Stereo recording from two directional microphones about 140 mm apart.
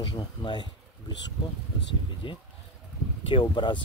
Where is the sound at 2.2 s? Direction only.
35° left (ahead or behind).